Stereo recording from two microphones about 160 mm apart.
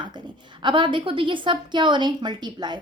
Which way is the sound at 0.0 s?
30° right (ahead or behind).